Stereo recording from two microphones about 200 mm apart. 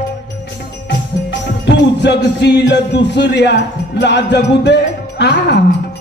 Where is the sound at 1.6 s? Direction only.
60° left (ahead or behind).